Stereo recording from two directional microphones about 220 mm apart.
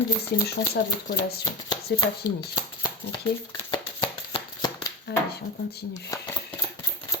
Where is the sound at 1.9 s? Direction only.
55° left (ahead or behind).